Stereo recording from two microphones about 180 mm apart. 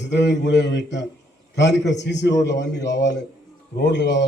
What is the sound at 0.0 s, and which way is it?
A man's voice, 75° left (ahead or behind).